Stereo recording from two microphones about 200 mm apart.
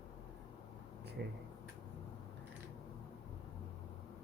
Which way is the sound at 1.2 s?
55° right (ahead or behind).